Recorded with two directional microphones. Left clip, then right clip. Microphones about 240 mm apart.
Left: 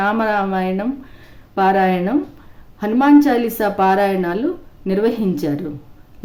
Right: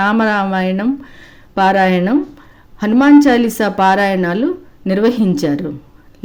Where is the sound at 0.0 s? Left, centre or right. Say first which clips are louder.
Right 3 dB; right.